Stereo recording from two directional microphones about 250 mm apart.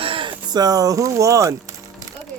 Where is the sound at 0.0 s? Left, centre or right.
Right.